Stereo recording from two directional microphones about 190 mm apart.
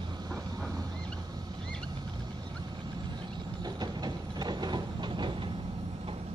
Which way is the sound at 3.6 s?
20° right (ahead or behind).